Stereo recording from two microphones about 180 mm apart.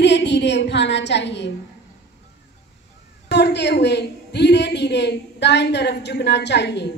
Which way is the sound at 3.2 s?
70° left (ahead or behind).